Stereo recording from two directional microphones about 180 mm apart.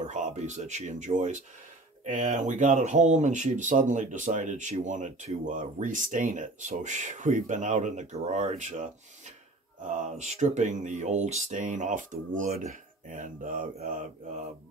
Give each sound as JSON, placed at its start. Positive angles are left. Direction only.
{"t": 0.0, "sound": "speech", "side_deg": -40}